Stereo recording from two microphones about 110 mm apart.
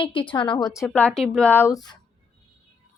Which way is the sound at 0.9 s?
10° left (ahead or behind).